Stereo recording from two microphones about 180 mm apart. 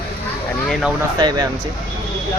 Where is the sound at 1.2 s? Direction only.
25° right (ahead or behind).